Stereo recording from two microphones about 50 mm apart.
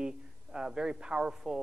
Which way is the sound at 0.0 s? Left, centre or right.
Centre.